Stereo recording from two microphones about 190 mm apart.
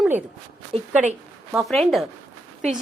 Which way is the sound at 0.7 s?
30° right (ahead or behind).